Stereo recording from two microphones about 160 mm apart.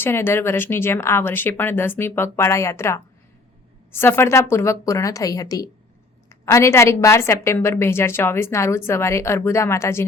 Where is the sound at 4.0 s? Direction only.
15° left (ahead or behind).